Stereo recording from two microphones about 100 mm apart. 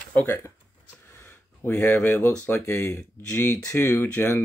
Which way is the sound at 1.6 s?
25° left (ahead or behind).